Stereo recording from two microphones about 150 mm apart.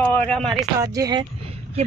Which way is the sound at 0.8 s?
25° right (ahead or behind).